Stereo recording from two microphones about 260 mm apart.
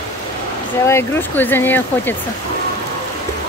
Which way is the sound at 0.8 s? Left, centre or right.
Centre.